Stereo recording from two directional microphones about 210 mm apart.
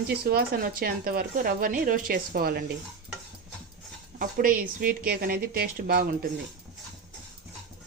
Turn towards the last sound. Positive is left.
turn(degrees=-45)  # may be behind; listen again after turning